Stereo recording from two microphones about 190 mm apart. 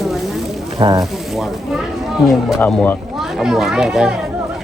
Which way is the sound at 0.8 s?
20° right (ahead or behind).